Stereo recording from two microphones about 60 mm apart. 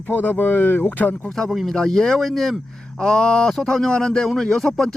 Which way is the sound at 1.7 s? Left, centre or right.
Centre.